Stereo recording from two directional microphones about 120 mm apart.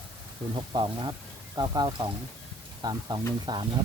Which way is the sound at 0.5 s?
40° right (ahead or behind).